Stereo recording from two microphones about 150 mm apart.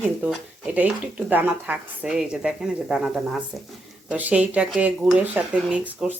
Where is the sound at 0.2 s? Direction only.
10° right (ahead or behind).